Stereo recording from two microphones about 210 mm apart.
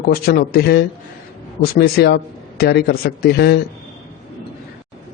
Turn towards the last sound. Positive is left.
turn(degrees=50)  # may be behind; listen again after turning